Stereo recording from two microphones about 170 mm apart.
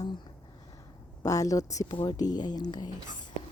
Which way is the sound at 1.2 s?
20° left (ahead or behind).